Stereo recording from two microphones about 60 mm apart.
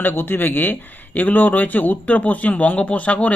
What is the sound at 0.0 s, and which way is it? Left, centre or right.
Speech, left.